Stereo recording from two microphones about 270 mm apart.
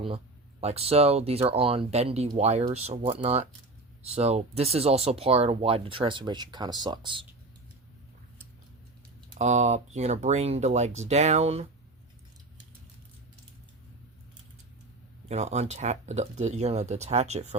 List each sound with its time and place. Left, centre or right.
0.6 s speech: right
9.4 s speech: right
15.3 s speech: right